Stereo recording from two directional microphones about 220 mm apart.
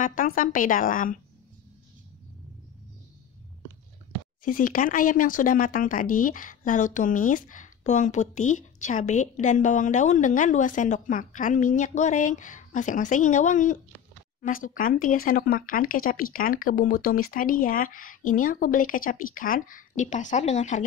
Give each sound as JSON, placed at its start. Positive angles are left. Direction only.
{"t": 0.0, "sound": "speech", "side_deg": 35}
{"t": 4.5, "sound": "speech", "side_deg": 40}